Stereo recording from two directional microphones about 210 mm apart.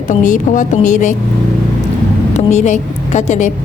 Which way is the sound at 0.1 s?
40° left (ahead or behind).